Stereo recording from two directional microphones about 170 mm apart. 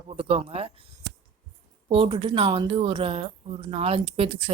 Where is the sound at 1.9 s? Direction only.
30° right (ahead or behind).